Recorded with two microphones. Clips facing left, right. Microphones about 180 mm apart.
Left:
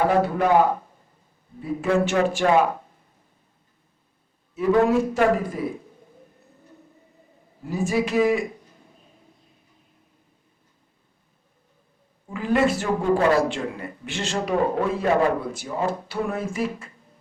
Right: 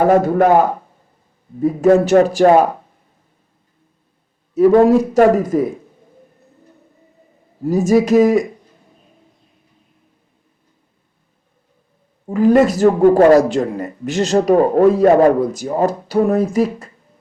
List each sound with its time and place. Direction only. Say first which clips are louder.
0.0 s a man's voice: right 8 dB; 45° right (ahead or behind)
1.6 s speech: right 10 dB; 40° right (ahead or behind)
4.5 s speech: right 9 dB; 40° right (ahead or behind)
7.6 s speech: right 10 dB; 40° right (ahead or behind)
12.2 s speech: right 9 dB; 40° right (ahead or behind)